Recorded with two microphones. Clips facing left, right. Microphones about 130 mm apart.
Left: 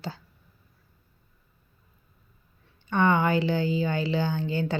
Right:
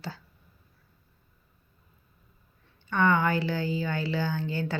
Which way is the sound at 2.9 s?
20° left (ahead or behind).